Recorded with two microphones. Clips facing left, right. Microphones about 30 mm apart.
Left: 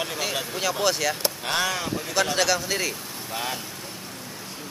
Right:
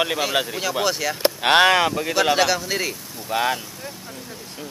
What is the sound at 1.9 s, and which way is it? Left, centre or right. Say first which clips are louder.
Speech: right 5 dB; right.